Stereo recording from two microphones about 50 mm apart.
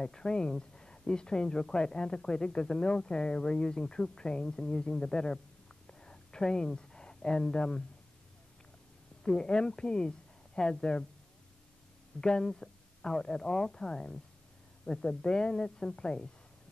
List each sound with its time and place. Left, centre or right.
0.0 s speech: centre
5.9 s a sound: centre
9.2 s a woman's voice: centre
12.2 s speech: centre